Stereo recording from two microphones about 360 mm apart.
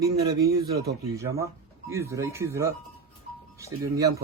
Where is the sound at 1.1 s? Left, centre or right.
Centre.